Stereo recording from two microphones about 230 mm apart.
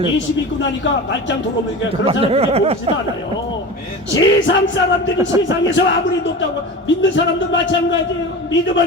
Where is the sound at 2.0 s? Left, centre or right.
Right.